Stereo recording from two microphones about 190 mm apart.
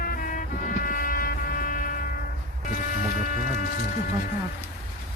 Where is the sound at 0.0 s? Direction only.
45° left (ahead or behind).